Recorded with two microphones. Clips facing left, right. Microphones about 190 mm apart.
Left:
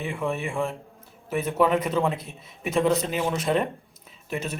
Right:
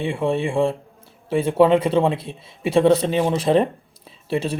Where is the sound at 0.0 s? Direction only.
30° right (ahead or behind).